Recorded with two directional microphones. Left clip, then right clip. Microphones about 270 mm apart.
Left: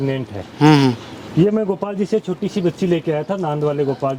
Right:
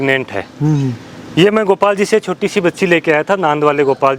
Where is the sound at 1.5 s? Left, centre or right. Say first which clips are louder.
Right 8 dB; centre.